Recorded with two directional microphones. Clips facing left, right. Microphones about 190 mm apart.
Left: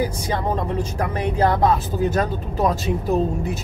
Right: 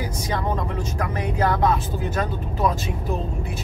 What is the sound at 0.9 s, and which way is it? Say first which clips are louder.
Speech: left 1 dB; 30° left (ahead or behind).